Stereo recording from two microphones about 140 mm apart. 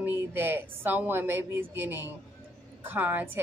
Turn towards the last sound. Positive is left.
turn(degrees=-15)  # may be behind; listen again after turning